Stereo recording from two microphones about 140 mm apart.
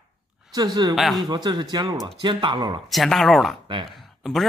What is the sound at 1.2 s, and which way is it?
Speech, 30° right (ahead or behind).